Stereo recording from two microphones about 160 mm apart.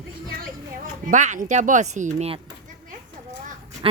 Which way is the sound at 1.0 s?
50° right (ahead or behind).